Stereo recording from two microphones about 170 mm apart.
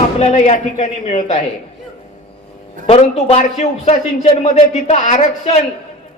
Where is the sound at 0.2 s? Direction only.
40° left (ahead or behind).